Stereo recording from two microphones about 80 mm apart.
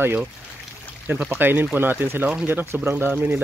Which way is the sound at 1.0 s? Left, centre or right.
Centre.